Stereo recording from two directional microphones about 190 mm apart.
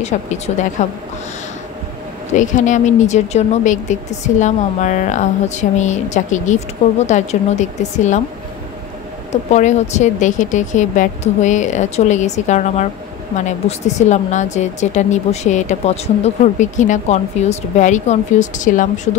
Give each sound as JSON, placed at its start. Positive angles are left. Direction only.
{"t": 0.0, "sound": "speech", "side_deg": 35}
{"t": 2.3, "sound": "speech", "side_deg": 40}
{"t": 9.3, "sound": "speech", "side_deg": 40}